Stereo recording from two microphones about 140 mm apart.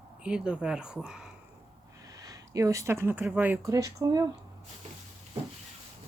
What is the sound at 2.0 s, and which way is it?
Speech, 25° right (ahead or behind).